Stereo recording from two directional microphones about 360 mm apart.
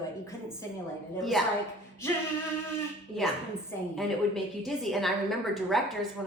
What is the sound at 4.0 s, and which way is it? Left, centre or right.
Speech, centre.